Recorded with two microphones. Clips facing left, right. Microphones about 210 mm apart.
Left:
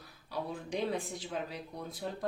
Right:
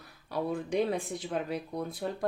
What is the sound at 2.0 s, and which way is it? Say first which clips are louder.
Speech: right 3 dB; 60° right (ahead or behind).